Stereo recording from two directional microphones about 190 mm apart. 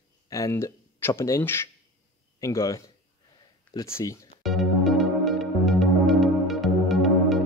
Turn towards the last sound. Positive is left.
turn(degrees=0)  # may be behind; listen again after turning